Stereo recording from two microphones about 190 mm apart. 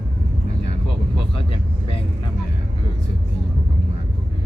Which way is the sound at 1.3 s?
30° left (ahead or behind).